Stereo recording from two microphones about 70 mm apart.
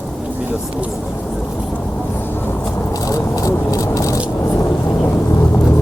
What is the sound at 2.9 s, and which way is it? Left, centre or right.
Vehicle, left.